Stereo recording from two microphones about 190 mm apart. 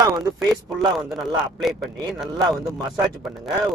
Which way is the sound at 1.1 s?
Centre (ahead or behind).